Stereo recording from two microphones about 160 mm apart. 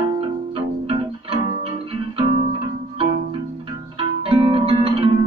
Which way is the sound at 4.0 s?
35° right (ahead or behind).